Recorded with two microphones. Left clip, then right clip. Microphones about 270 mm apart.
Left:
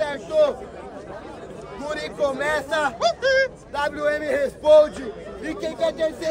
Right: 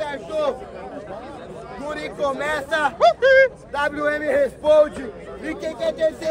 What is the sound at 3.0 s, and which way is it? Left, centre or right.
Speech, right.